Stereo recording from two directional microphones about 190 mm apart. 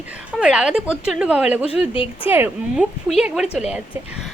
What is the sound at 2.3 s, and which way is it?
A woman's voice, 10° right (ahead or behind).